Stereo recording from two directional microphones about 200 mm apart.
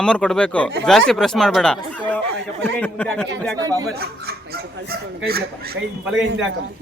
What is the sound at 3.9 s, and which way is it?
Speech, 50° right (ahead or behind).